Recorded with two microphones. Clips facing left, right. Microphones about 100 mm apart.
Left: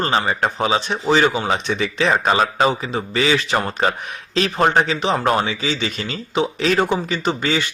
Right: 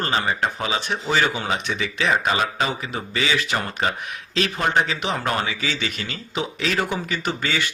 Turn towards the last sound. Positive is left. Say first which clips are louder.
# left 5 dB
turn(degrees=25)  # may be behind; listen again after turning